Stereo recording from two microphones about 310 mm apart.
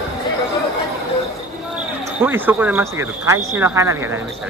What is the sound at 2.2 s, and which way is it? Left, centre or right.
Speech, centre.